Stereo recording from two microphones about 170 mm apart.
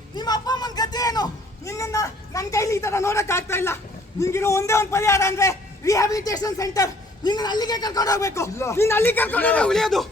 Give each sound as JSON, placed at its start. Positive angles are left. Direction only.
{"t": 0.2, "sound": "a man's voice", "side_deg": 25}